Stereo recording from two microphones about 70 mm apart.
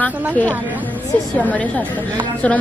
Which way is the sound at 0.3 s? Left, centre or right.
Left.